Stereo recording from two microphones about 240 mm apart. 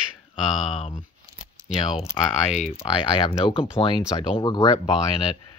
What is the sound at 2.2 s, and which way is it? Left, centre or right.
Speech, centre.